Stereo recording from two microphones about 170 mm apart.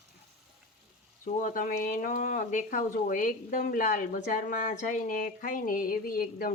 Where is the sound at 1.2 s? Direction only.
50° left (ahead or behind).